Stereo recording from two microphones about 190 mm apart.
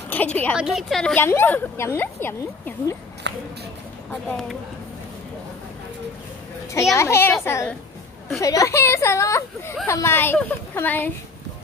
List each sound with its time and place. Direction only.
0.1 s a woman's voice: 10° left (ahead or behind)
3.3 s a sound: 70° right (ahead or behind)
4.1 s speech: 5° left (ahead or behind)
6.7 s a woman's voice: 15° left (ahead or behind)